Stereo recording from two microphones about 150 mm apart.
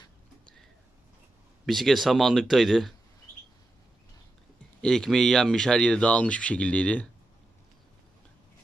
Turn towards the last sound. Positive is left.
turn(degrees=10)  # may be behind; listen again after turning